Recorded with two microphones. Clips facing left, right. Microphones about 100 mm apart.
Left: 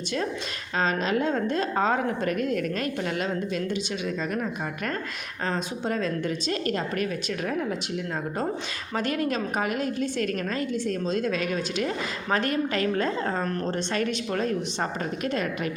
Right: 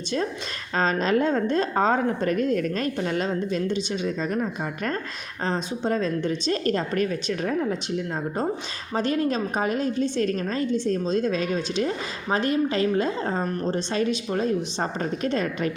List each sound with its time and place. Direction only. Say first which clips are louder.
0.8 s a woman's voice: right 3 dB; 40° right (ahead or behind)
5.5 s a woman's voice: right 3 dB; 30° right (ahead or behind)
9.0 s a woman's voice: right 3 dB; 30° right (ahead or behind)